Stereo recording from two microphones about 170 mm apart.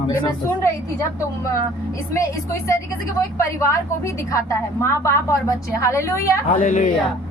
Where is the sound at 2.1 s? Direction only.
15° left (ahead or behind).